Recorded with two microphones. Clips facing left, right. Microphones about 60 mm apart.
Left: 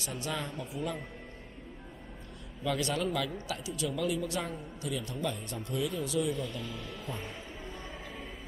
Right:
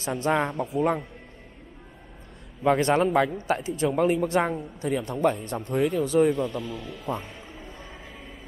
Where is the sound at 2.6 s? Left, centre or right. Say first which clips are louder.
Right 11 dB; right.